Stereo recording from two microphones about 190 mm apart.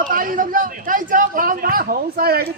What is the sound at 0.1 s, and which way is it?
A man's voice, 45° right (ahead or behind).